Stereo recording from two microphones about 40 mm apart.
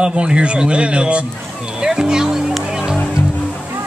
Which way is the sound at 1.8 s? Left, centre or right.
Centre.